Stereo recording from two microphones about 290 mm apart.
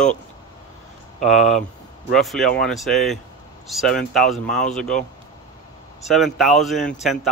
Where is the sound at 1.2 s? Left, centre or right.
Centre.